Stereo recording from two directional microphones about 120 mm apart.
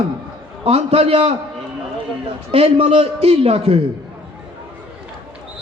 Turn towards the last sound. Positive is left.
turn(degrees=-60)  # may be behind; listen again after turning